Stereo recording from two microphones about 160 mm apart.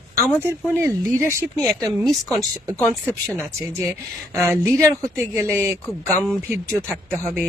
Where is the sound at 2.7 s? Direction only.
10° left (ahead or behind).